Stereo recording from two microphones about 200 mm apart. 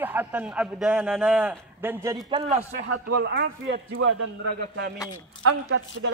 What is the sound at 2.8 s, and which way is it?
A man's voice, 55° right (ahead or behind).